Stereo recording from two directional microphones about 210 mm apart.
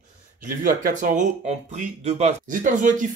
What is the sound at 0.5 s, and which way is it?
Speech, 40° right (ahead or behind).